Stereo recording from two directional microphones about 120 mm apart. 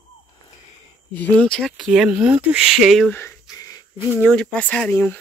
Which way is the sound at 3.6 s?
30° left (ahead or behind).